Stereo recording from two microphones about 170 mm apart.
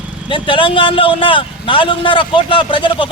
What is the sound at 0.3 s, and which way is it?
A man's voice, 30° left (ahead or behind).